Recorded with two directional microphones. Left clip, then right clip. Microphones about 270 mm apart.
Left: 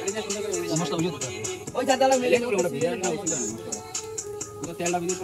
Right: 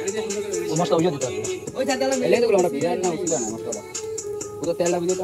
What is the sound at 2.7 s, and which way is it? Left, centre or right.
Speech, centre.